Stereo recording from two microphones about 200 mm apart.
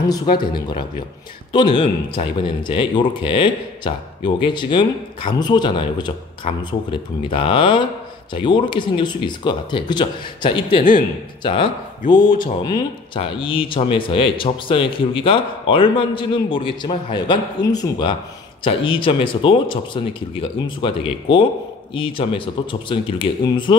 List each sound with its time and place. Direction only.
0.1 s speech: 20° left (ahead or behind)
10.8 s a man's voice: 45° left (ahead or behind)
11.4 s speech: 25° left (ahead or behind)